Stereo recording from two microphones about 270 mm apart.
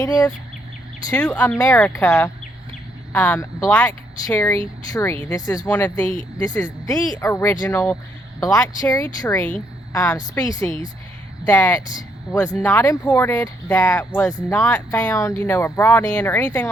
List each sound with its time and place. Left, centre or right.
0.0 s speech: centre
5.2 s speech: centre
6.1 s speech: centre
6.5 s speech: centre